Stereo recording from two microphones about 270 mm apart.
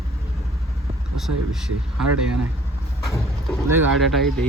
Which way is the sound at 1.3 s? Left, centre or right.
Right.